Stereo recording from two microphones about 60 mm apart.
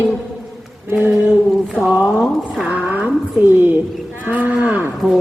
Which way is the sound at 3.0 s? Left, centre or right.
Right.